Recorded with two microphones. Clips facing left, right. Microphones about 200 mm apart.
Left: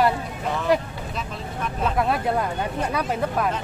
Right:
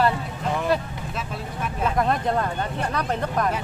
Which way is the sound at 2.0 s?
5° left (ahead or behind).